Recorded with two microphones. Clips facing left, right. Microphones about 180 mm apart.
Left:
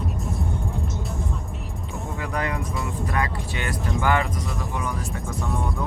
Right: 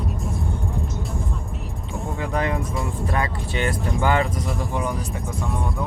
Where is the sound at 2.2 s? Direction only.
30° right (ahead or behind).